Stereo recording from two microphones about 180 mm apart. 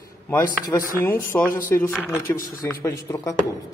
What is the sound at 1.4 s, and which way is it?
Speech, 50° left (ahead or behind).